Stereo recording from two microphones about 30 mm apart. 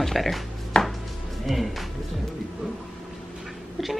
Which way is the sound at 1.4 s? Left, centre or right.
Centre.